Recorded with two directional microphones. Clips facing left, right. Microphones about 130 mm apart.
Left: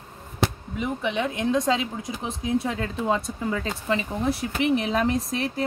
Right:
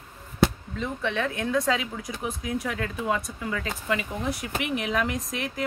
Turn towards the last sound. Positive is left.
turn(degrees=35)  # may be behind; listen again after turning